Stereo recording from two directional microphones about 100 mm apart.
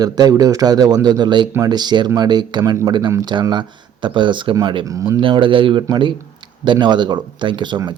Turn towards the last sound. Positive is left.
turn(degrees=-50)  # may be behind; listen again after turning